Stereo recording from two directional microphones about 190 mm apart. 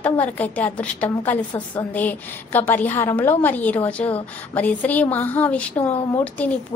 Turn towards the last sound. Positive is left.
turn(degrees=10)  # may be behind; listen again after turning